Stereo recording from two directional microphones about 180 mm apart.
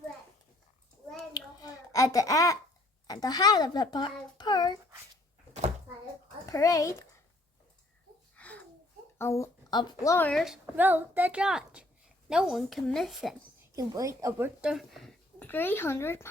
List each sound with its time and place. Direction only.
1.3 s a sound: 20° left (ahead or behind)
3.1 s a child's voice: 20° left (ahead or behind)
6.4 s speech: 15° left (ahead or behind)
8.4 s a sound: 10° left (ahead or behind)
9.1 s a woman's voice: 15° left (ahead or behind)
10.3 s a child's voice: centre (ahead or behind)
13.7 s a woman's voice: 20° right (ahead or behind); by 16.3 s 15° left (ahead or behind)